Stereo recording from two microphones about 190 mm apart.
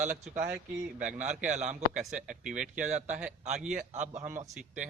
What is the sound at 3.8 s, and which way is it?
Speech, 40° right (ahead or behind).